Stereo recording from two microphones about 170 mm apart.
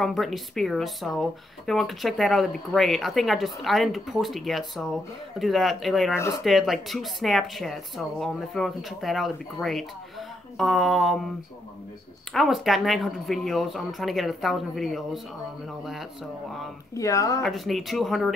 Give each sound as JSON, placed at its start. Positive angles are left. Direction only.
{"t": 0.0, "sound": "speech", "side_deg": 0}
{"t": 12.3, "sound": "speech", "side_deg": 0}
{"t": 16.9, "sound": "speech", "side_deg": 20}
{"t": 17.4, "sound": "speech", "side_deg": 0}